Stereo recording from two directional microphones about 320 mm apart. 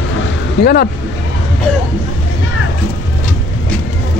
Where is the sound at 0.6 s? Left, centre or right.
Left.